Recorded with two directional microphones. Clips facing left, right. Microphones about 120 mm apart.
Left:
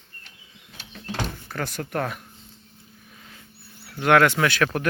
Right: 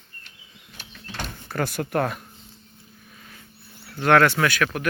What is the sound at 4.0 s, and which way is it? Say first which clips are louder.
Speech: even; 15° left (ahead or behind).